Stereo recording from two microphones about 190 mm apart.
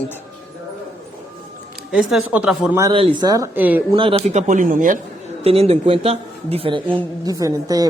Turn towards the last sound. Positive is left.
turn(degrees=-20)  # may be behind; listen again after turning